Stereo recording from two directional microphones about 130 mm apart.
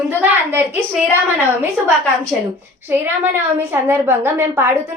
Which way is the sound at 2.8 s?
15° right (ahead or behind).